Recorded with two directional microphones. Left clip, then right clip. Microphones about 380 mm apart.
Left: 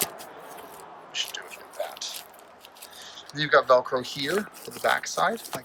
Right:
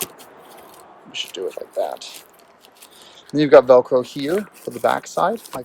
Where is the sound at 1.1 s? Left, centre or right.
Centre.